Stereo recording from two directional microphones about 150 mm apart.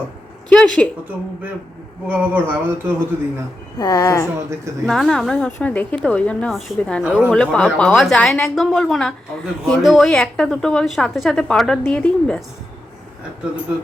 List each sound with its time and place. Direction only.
0.5 s a woman's voice: 5° left (ahead or behind)
2.0 s speech: 10° right (ahead or behind)
3.8 s a woman's voice: 25° left (ahead or behind)
4.9 s a woman's voice: 5° left (ahead or behind)
7.0 s speech: 5° right (ahead or behind)
7.3 s a woman's voice: 5° left (ahead or behind)